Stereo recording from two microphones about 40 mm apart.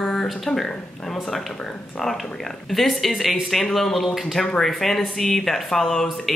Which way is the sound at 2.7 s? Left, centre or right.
Centre.